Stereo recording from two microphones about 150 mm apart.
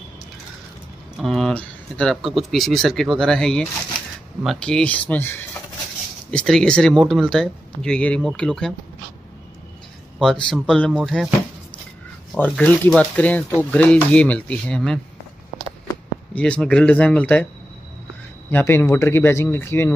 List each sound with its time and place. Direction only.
1.2 s speech: centre (ahead or behind)
10.1 s speech: centre (ahead or behind)
12.4 s speech: 10° left (ahead or behind)
16.3 s speech: 10° left (ahead or behind)
18.5 s speech: 15° left (ahead or behind)